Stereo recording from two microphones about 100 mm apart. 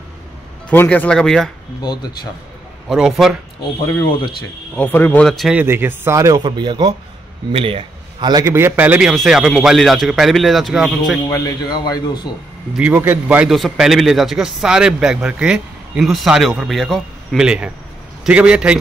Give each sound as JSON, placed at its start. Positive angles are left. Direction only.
{"t": 0.7, "sound": "speech", "side_deg": 15}
{"t": 2.9, "sound": "a man's voice", "side_deg": -5}
{"t": 4.7, "sound": "speech", "side_deg": 20}
{"t": 5.2, "sound": "a man's voice", "side_deg": 5}
{"t": 5.5, "sound": "a man's voice", "side_deg": -20}
{"t": 6.4, "sound": "a man's voice", "side_deg": -50}
{"t": 7.5, "sound": "a man's voice", "side_deg": -65}
{"t": 8.5, "sound": "a man's voice", "side_deg": -25}
{"t": 9.1, "sound": "a man's voice", "side_deg": -5}
{"t": 11.2, "sound": "a man's voice", "side_deg": 35}
{"t": 12.7, "sound": "a man's voice", "side_deg": -15}
{"t": 13.5, "sound": "a man's voice", "side_deg": -5}